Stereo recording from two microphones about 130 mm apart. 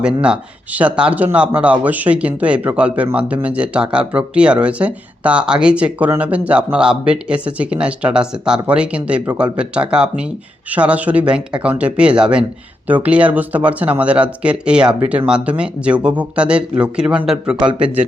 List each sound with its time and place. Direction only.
0.2 s speech: 10° right (ahead or behind)
17.6 s speech: 40° right (ahead or behind)